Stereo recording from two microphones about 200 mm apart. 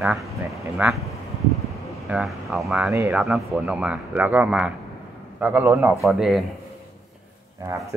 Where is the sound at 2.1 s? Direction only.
5° right (ahead or behind).